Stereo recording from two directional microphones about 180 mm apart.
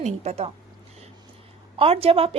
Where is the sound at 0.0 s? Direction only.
40° right (ahead or behind).